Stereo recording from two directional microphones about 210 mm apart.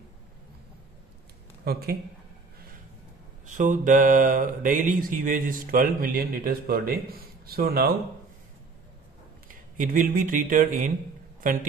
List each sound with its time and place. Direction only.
1.6 s speech: 45° right (ahead or behind)
3.4 s a sound: 40° right (ahead or behind)
9.5 s speech: 40° right (ahead or behind)